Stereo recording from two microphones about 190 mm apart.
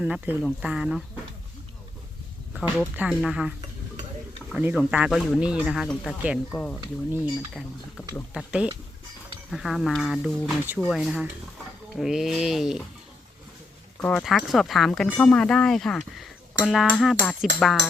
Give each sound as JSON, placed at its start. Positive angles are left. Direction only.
{"t": 0.0, "sound": "speech", "side_deg": -5}
{"t": 2.5, "sound": "speech", "side_deg": 0}
{"t": 4.5, "sound": "speech", "side_deg": -5}
{"t": 6.7, "sound": "speech", "side_deg": -15}
{"t": 8.3, "sound": "speech", "side_deg": -5}
{"t": 14.0, "sound": "speech", "side_deg": 5}